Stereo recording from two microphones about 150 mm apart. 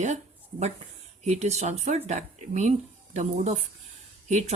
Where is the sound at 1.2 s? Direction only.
45° right (ahead or behind).